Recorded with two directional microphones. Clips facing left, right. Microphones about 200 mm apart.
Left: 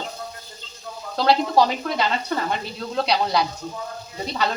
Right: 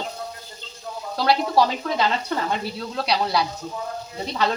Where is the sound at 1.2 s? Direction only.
20° left (ahead or behind).